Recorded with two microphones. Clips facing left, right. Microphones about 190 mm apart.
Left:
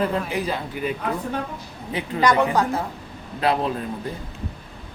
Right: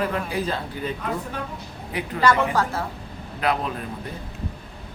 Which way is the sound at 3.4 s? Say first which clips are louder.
Left 3 dB; 30° left (ahead or behind).